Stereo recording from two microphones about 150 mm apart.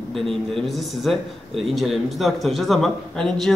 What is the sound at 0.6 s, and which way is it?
A man's voice, centre (ahead or behind).